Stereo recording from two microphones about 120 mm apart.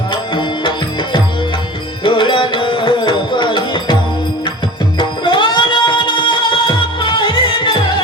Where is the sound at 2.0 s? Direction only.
40° left (ahead or behind).